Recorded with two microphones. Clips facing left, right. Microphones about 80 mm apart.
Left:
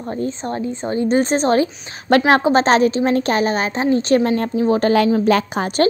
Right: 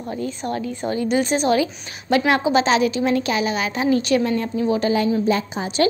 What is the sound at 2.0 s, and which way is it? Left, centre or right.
A woman's voice, left.